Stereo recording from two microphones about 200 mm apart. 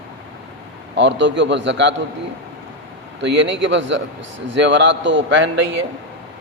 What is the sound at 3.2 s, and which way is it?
A man's voice, 65° right (ahead or behind).